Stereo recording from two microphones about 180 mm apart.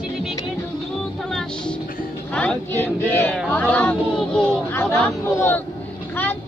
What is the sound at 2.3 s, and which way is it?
Speech, 5° left (ahead or behind).